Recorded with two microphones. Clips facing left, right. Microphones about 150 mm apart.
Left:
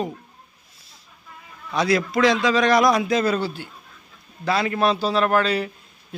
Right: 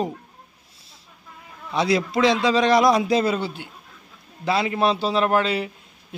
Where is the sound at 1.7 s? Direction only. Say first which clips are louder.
Even; 25° right (ahead or behind).